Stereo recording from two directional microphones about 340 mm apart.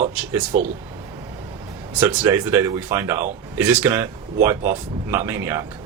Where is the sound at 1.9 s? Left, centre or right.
Centre.